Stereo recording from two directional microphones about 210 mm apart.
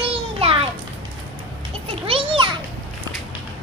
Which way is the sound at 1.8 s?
25° right (ahead or behind).